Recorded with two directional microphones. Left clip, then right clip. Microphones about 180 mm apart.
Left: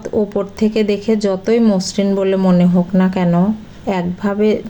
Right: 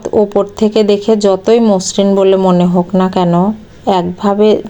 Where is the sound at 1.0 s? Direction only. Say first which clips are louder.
Right 6 dB; 20° right (ahead or behind).